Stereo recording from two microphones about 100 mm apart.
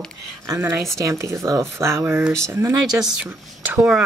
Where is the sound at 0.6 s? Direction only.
25° right (ahead or behind).